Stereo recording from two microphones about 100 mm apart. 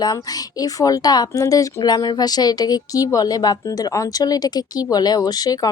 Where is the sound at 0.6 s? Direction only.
35° left (ahead or behind).